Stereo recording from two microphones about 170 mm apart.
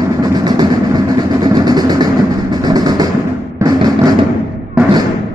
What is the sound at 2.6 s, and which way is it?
Vehicle, 25° right (ahead or behind).